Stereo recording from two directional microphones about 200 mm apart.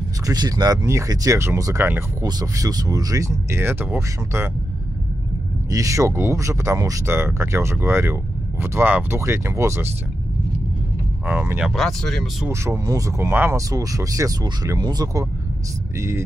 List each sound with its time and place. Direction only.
0.3 s speech: 20° right (ahead or behind)
5.7 s speech: 15° right (ahead or behind)
11.2 s speech: 5° right (ahead or behind)
12.4 s speech: 15° right (ahead or behind)